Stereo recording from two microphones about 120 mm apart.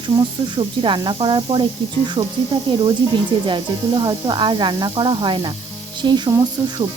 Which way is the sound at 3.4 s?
40° right (ahead or behind).